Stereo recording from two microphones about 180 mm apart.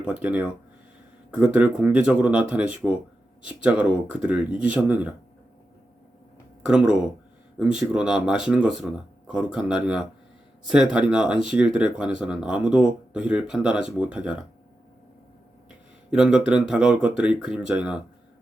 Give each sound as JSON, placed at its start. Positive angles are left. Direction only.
{"t": 0.0, "sound": "speech", "side_deg": -5}
{"t": 6.7, "sound": "speech", "side_deg": -5}
{"t": 11.1, "sound": "speech", "side_deg": -5}
{"t": 16.0, "sound": "speech", "side_deg": -5}